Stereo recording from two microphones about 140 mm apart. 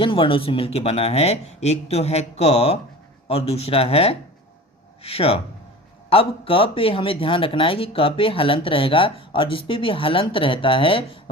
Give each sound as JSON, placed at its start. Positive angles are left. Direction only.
{"t": 0.0, "sound": "speech", "side_deg": 40}